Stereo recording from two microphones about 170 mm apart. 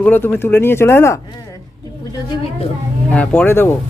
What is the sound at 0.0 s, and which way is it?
Speech, 10° left (ahead or behind).